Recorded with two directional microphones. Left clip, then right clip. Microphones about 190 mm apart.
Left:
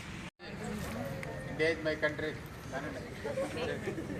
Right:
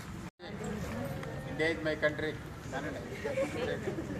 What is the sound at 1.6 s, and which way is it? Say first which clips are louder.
Speech: even; 10° right (ahead or behind).